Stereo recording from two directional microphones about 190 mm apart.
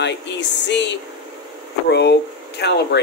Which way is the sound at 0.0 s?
65° left (ahead or behind).